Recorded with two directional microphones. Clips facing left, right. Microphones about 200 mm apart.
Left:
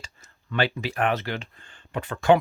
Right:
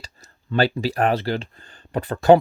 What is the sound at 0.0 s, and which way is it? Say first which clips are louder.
Speech: right 3 dB; 35° right (ahead or behind).